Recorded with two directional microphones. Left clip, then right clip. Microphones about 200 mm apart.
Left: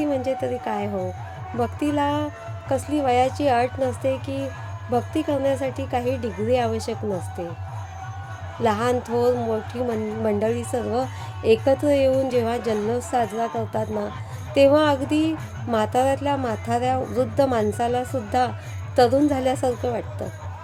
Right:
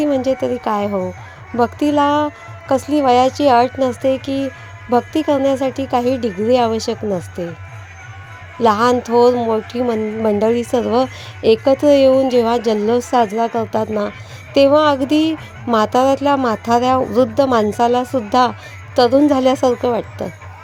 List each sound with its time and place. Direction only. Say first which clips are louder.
0.0 s speech: right 7 dB; 35° right (ahead or behind)
8.6 s speech: right 8 dB; 35° right (ahead or behind)